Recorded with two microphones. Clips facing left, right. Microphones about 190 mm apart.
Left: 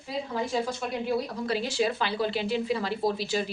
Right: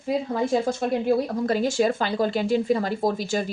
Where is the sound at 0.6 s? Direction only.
50° right (ahead or behind).